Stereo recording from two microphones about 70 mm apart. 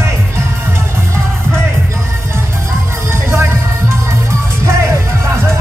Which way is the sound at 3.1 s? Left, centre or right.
Right.